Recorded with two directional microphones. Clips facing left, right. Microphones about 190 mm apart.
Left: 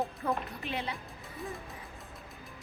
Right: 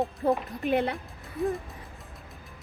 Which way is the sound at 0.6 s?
55° right (ahead or behind).